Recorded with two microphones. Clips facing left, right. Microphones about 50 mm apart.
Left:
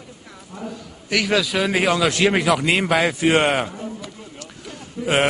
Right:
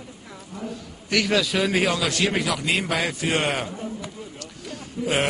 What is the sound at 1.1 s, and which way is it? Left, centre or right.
A man's voice, centre.